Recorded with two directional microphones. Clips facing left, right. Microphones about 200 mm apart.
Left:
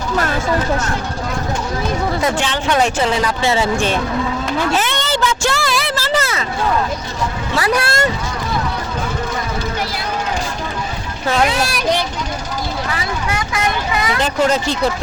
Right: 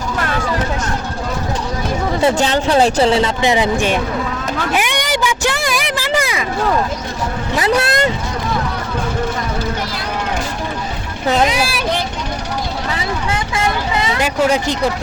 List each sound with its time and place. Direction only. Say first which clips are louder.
2.2 s speech: right 4 dB; 35° right (ahead or behind)
3.4 s speech: right 2 dB; 15° right (ahead or behind)
4.7 s a sound: even; 15° right (ahead or behind)
7.5 s speech: right 2 dB; 20° right (ahead or behind)
11.3 s speech: right 1 dB; 20° right (ahead or behind)
12.9 s speech: right 1 dB; 25° right (ahead or behind)
14.2 s speech: right 1 dB; 10° right (ahead or behind)